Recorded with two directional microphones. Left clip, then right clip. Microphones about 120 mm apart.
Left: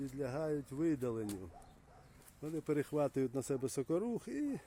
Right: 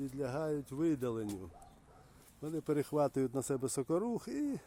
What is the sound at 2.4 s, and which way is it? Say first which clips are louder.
Speech: right 2 dB; 15° right (ahead or behind).